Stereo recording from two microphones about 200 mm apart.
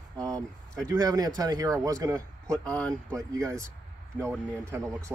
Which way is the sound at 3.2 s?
15° right (ahead or behind).